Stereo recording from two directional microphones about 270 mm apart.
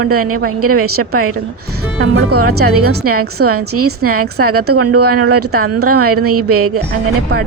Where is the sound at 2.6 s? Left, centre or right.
Right.